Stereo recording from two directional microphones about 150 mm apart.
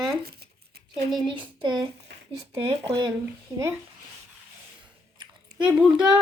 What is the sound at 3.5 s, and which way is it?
Female singing, 20° right (ahead or behind).